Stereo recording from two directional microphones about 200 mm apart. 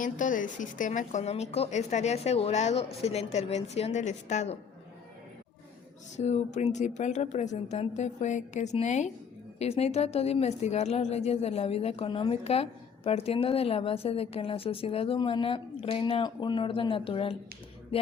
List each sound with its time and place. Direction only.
0.0 s a woman's voice: 40° left (ahead or behind)
6.1 s a woman's voice: 35° left (ahead or behind)